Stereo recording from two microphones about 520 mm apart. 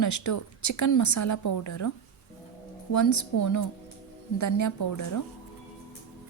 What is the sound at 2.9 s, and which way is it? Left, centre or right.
A woman's voice, left.